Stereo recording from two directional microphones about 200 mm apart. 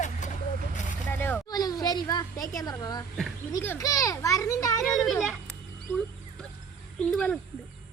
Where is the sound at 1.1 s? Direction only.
10° left (ahead or behind).